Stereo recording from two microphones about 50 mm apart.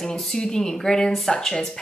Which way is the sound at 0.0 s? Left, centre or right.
Centre.